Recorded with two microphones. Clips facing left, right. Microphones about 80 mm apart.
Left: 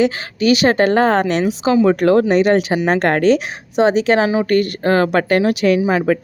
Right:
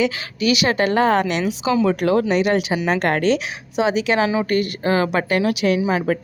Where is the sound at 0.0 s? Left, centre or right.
Left.